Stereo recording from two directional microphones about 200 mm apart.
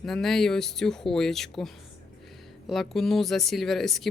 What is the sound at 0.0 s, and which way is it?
Speech, centre (ahead or behind).